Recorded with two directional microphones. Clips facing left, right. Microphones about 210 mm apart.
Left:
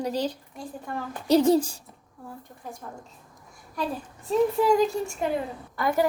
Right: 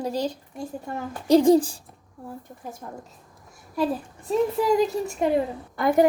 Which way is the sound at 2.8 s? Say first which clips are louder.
Right 3 dB; 20° right (ahead or behind).